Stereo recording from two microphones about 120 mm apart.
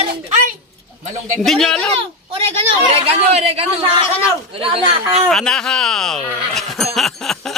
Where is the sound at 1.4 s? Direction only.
5° left (ahead or behind).